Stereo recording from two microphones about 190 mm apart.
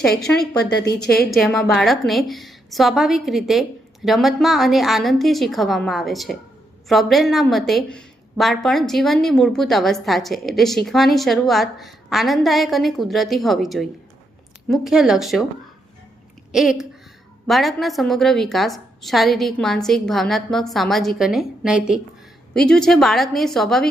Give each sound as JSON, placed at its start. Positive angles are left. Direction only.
{"t": 1.0, "sound": "a woman's voice", "side_deg": 55}
{"t": 1.3, "sound": "a woman's voice", "side_deg": 0}
{"t": 16.5, "sound": "a woman's voice", "side_deg": 0}